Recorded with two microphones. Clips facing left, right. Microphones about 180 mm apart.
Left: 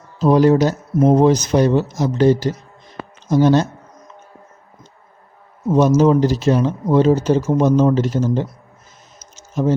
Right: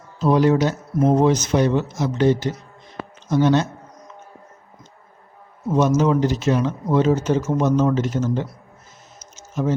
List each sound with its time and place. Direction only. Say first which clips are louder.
0.2 s speech: left 4 dB; 40° left (ahead or behind)
5.7 s speech: left 4 dB; 35° left (ahead or behind)
9.1 s music: left 4 dB; 30° left (ahead or behind)